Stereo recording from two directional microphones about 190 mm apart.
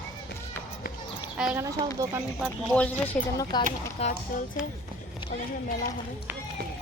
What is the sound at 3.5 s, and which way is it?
Speech, 20° left (ahead or behind).